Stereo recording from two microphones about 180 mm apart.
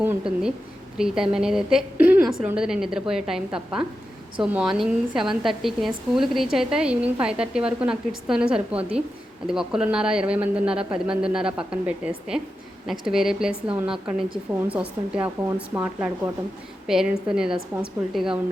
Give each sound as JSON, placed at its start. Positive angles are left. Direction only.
{"t": 0.0, "sound": "a woman's voice", "side_deg": -10}